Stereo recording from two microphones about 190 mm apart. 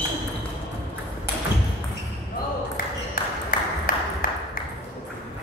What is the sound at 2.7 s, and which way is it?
Ping, 50° left (ahead or behind).